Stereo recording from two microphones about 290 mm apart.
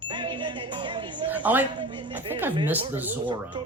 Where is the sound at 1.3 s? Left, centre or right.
Centre.